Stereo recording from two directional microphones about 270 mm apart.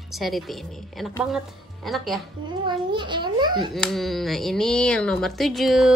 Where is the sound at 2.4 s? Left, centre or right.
Centre.